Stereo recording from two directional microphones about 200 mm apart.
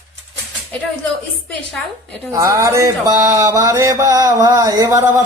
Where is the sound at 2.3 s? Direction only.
15° right (ahead or behind).